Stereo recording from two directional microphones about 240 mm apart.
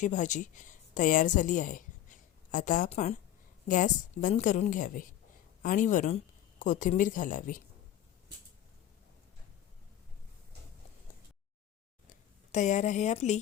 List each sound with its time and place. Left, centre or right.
0.0 s a woman's voice: left
12.5 s a woman's voice: left